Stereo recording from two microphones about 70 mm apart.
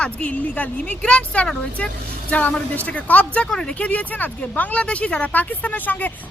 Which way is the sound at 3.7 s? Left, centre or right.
Left.